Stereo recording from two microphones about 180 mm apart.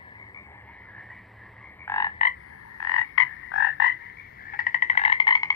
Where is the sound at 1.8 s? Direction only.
15° left (ahead or behind).